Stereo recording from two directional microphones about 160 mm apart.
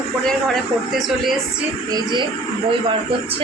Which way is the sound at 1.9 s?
30° right (ahead or behind).